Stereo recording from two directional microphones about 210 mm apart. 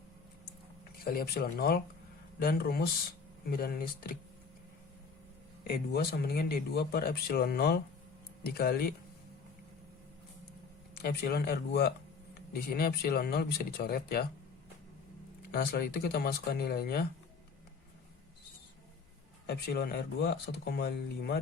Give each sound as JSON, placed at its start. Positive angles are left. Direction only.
{"t": 1.0, "sound": "speech", "side_deg": 45}
{"t": 5.6, "sound": "speech", "side_deg": 45}
{"t": 11.0, "sound": "speech", "side_deg": 50}
{"t": 15.5, "sound": "speech", "side_deg": 45}
{"t": 19.5, "sound": "speech", "side_deg": 50}